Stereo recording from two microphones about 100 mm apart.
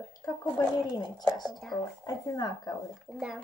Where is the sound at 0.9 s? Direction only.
45° left (ahead or behind).